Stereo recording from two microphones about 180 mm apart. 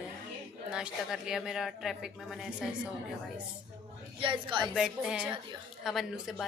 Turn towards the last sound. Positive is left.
turn(degrees=0)  # may be behind; listen again after turning